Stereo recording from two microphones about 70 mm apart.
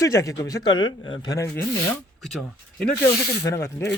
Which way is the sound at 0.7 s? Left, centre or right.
Left.